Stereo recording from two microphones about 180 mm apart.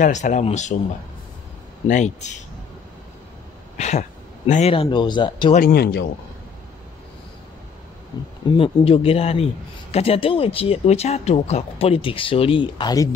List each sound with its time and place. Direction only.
0.0 s a man's voice: 45° left (ahead or behind)
1.9 s a man's voice: 40° left (ahead or behind)
3.7 s a sound: 40° left (ahead or behind)
4.5 s a man's voice: 40° left (ahead or behind)
4.7 s speech: 25° left (ahead or behind)
5.5 s speech: 55° left (ahead or behind)
8.1 s a man's voice: 25° left (ahead or behind)